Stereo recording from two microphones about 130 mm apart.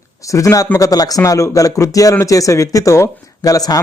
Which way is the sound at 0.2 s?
25° left (ahead or behind).